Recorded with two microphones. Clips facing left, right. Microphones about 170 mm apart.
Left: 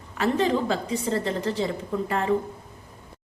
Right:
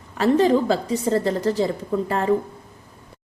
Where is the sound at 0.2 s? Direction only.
40° right (ahead or behind).